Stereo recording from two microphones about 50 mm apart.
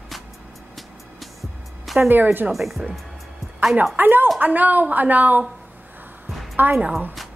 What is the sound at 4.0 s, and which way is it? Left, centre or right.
A woman's voice, right.